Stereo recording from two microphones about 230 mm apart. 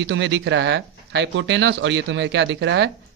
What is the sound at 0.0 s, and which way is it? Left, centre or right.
Speech, right.